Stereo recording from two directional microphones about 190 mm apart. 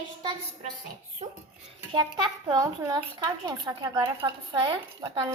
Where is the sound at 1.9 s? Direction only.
25° right (ahead or behind).